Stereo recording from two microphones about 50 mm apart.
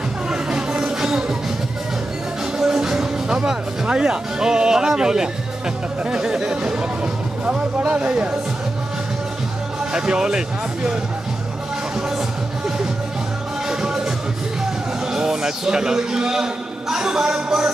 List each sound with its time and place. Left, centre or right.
0.3 s music: centre
2.6 s a man's voice: centre
7.9 s speech: right
9.9 s a man's voice: centre
13.7 s music: centre
15.1 s a man's voice: centre